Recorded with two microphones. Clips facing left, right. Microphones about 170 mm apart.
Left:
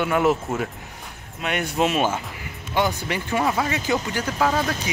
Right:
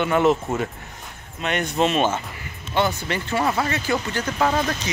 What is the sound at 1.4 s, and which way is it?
Speech, 10° left (ahead or behind).